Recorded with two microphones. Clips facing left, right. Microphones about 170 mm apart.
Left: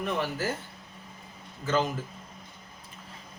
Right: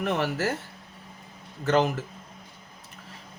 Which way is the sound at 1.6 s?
70° right (ahead or behind).